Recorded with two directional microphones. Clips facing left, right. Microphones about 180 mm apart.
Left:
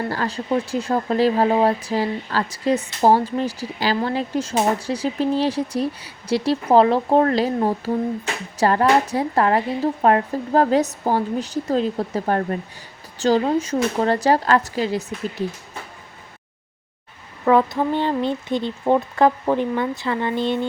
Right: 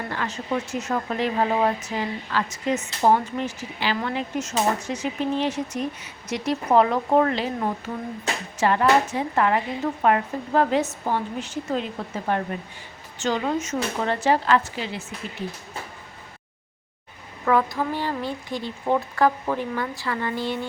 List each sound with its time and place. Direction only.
0.1 s speech: 35° left (ahead or behind)
17.4 s speech: 25° left (ahead or behind)